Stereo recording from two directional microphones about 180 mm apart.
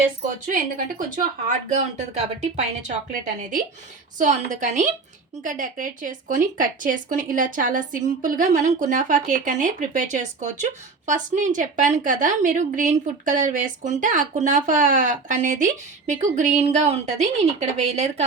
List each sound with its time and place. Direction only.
0.4 s speech: 45° right (ahead or behind)
4.2 s speech: 45° right (ahead or behind)